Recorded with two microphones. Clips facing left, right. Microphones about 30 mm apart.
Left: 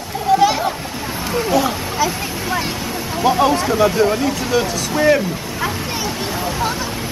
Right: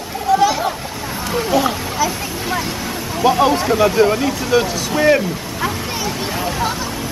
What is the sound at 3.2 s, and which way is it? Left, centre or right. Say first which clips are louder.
Speech: right 1 dB; centre.